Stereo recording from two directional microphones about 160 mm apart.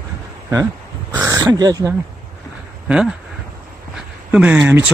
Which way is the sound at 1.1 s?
20° right (ahead or behind).